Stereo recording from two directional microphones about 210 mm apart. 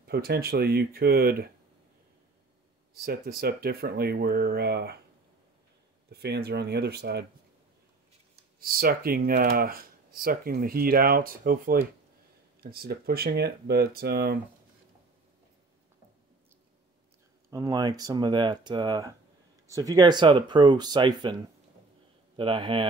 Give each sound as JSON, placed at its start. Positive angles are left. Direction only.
{"t": 0.0, "sound": "speech", "side_deg": -50}
{"t": 3.0, "sound": "speech", "side_deg": -45}
{"t": 6.0, "sound": "speech", "side_deg": -50}
{"t": 8.5, "sound": "speech", "side_deg": -45}
{"t": 17.5, "sound": "speech", "side_deg": -15}
{"t": 22.4, "sound": "speech", "side_deg": -25}